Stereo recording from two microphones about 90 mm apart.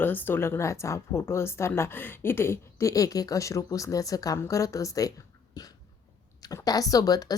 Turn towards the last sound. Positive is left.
turn(degrees=45)  # may be behind; listen again after turning